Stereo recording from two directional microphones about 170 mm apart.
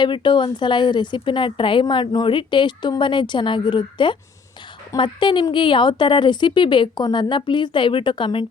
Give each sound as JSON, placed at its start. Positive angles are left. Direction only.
{"t": 0.0, "sound": "speech", "side_deg": 25}